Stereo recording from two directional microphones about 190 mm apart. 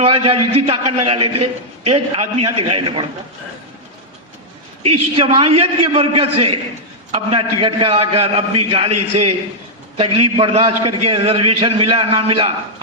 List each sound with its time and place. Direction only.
0.0 s a man's voice: 30° right (ahead or behind)
5.1 s a man's voice: 30° right (ahead or behind)